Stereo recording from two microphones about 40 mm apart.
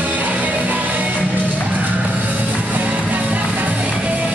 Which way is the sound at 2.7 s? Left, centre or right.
Right.